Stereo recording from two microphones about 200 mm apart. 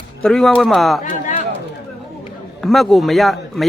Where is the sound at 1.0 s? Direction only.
30° left (ahead or behind).